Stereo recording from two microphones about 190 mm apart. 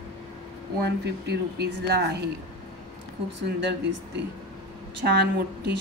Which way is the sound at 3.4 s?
65° right (ahead or behind).